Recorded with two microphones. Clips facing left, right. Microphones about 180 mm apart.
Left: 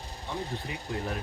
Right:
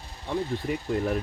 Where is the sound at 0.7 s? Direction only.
50° right (ahead or behind).